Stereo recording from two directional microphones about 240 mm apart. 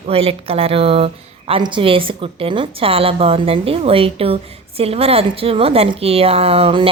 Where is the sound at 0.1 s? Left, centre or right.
Right.